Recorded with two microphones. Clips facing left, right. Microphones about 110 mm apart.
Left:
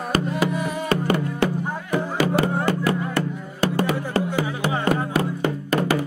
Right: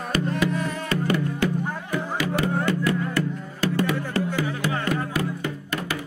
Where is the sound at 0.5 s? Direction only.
10° left (ahead or behind).